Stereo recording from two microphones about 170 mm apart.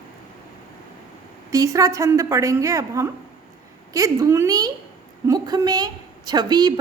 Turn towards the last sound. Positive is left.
turn(degrees=-25)  # may be behind; listen again after turning